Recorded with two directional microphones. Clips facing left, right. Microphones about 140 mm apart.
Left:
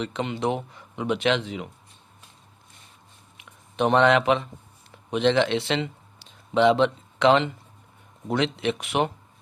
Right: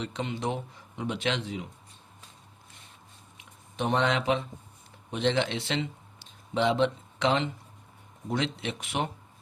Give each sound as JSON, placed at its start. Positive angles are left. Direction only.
{"t": 0.0, "sound": "speech", "side_deg": 75}
{"t": 3.3, "sound": "a sound", "side_deg": 70}
{"t": 5.1, "sound": "speech", "side_deg": 80}